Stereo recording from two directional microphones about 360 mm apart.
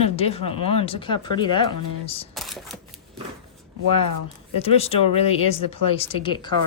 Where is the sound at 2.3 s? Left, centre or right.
Centre.